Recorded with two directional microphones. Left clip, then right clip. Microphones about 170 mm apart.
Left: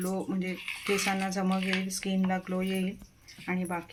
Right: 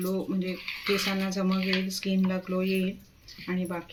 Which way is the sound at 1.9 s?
25° left (ahead or behind).